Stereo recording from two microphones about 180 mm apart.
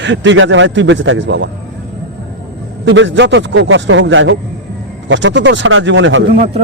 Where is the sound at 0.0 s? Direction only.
85° right.